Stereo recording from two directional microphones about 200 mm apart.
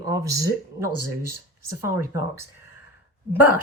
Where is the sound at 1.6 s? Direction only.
15° right (ahead or behind).